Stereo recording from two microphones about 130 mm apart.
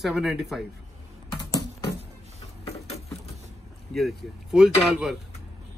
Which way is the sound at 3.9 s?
Centre (ahead or behind).